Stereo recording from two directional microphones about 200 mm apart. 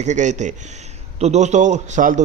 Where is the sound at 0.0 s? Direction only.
35° right (ahead or behind).